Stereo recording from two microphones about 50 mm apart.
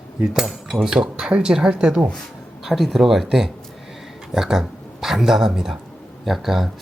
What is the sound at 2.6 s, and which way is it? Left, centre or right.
Speech, centre.